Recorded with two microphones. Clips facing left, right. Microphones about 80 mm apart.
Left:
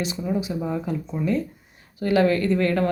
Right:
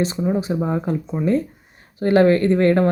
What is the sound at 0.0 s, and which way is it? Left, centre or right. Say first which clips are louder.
A woman's voice: right 5 dB; right.